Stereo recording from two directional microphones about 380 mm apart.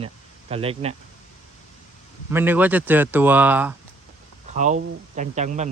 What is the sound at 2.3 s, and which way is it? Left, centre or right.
Speech, centre.